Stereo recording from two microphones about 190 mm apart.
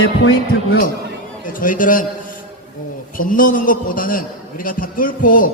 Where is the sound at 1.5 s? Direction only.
45° left (ahead or behind).